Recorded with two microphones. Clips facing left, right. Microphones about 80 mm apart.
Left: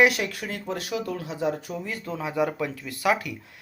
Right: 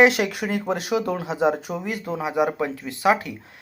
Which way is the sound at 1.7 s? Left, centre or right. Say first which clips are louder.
Right 4 dB; right.